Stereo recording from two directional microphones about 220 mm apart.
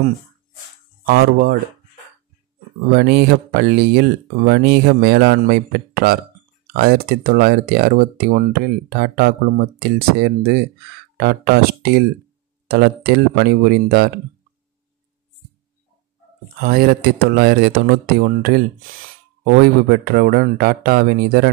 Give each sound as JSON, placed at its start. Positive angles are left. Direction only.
{"t": 1.0, "sound": "speech", "side_deg": -45}
{"t": 2.9, "sound": "speech", "side_deg": -45}
{"t": 16.5, "sound": "speech", "side_deg": -45}